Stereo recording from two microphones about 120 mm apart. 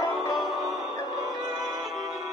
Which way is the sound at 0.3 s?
Centre (ahead or behind).